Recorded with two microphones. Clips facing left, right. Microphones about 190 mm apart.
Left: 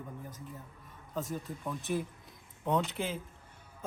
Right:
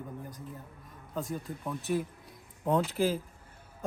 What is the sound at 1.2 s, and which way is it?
Speech, centre (ahead or behind).